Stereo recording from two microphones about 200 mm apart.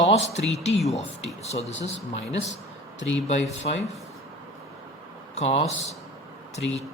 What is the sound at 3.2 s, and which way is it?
Speech, 35° left (ahead or behind).